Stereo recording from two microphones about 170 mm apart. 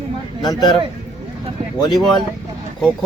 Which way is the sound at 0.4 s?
25° left (ahead or behind).